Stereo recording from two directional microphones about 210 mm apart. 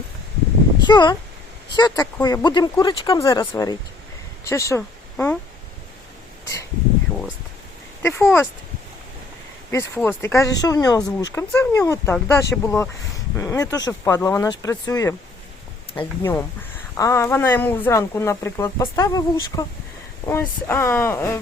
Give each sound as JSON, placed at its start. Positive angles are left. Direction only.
{"t": 0.8, "sound": "speech", "side_deg": 20}
{"t": 8.0, "sound": "speech", "side_deg": 10}
{"t": 9.7, "sound": "speech", "side_deg": 10}